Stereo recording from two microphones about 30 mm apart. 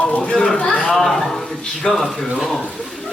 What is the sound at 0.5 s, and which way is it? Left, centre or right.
Speech, left.